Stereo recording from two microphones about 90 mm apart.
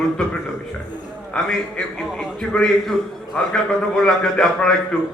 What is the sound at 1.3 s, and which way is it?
A man's voice, 10° left (ahead or behind).